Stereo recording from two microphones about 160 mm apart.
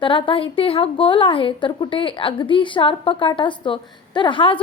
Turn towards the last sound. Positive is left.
turn(degrees=30)  # may be behind; listen again after turning